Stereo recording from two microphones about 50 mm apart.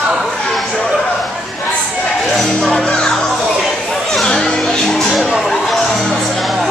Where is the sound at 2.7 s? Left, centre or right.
Centre.